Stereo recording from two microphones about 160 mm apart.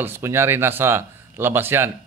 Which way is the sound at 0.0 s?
15° right (ahead or behind).